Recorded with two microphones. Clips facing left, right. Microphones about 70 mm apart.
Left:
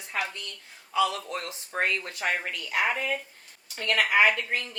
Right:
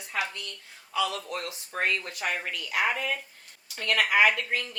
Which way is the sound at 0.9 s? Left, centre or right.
Left.